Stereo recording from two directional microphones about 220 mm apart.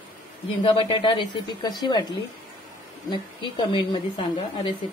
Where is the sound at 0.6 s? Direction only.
25° left (ahead or behind).